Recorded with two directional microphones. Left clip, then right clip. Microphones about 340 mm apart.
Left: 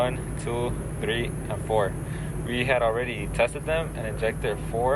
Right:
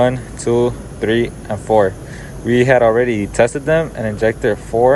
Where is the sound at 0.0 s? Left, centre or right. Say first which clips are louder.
Right 11 dB; right.